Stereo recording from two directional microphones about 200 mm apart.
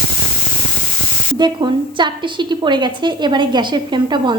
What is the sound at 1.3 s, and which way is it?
A woman's voice, 20° right (ahead or behind).